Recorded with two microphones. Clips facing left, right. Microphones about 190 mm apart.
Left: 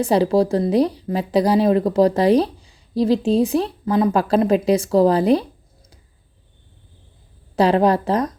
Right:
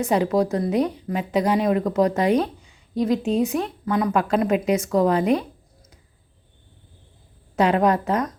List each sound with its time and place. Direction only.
0.0 s speech: 30° left (ahead or behind)
7.5 s speech: 35° left (ahead or behind)